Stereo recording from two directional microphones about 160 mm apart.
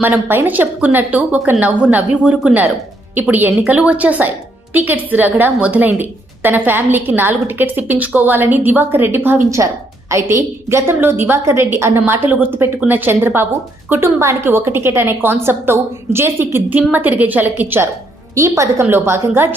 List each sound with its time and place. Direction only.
0.0 s a woman's voice: 10° right (ahead or behind)